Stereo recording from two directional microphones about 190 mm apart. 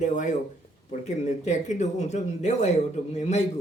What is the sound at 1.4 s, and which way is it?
Speech, 40° left (ahead or behind).